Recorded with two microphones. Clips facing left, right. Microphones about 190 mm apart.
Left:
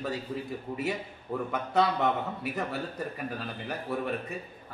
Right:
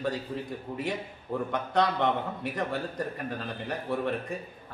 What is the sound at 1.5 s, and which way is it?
A man's voice, 5° left (ahead or behind).